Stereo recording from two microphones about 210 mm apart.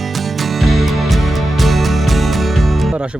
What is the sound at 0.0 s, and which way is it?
Music, centre (ahead or behind).